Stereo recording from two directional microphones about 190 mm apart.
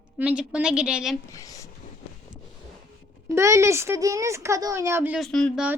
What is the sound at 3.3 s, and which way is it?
Speech, 15° right (ahead or behind).